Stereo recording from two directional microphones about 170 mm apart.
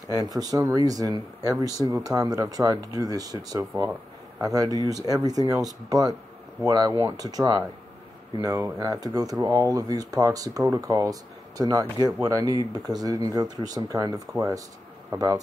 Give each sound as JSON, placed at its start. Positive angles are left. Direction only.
{"t": 0.1, "sound": "speech", "side_deg": -20}